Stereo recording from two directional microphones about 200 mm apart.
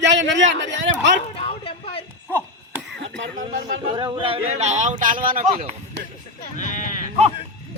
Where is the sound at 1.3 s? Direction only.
25° left (ahead or behind).